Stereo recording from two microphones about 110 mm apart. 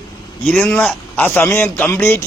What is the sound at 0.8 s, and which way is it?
Speech, 15° left (ahead or behind).